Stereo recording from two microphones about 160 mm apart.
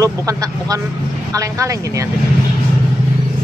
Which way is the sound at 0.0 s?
20° right (ahead or behind).